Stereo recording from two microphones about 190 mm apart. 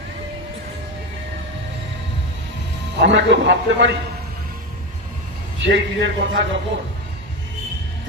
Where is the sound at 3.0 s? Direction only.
70° right (ahead or behind).